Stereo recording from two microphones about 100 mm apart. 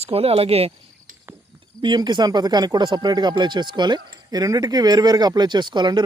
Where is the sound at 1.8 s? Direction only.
50° right (ahead or behind).